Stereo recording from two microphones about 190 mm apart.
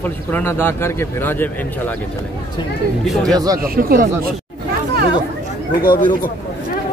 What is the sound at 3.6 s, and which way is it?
Speech, 50° right (ahead or behind).